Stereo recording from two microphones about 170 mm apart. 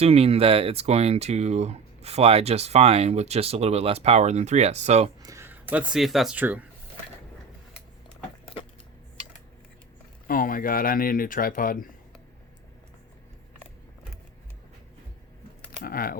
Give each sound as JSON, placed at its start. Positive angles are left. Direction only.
{"t": 0.0, "sound": "speech", "side_deg": -35}
{"t": 5.2, "sound": "speech", "side_deg": -15}
{"t": 10.2, "sound": "speech", "side_deg": 55}
{"t": 15.8, "sound": "speech", "side_deg": 60}